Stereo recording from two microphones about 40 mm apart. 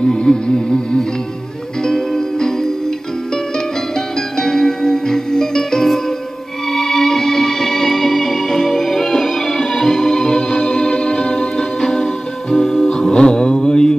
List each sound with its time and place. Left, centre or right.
0.0 s music: centre